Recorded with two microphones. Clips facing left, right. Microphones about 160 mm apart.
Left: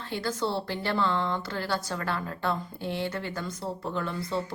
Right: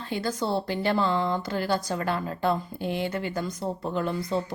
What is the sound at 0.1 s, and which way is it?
A woman's voice, 15° right (ahead or behind).